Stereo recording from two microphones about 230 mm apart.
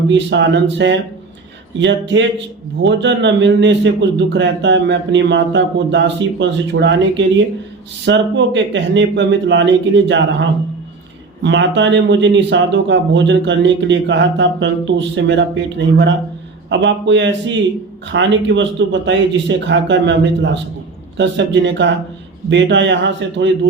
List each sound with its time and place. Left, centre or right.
0.1 s speech: right
11.4 s speech: right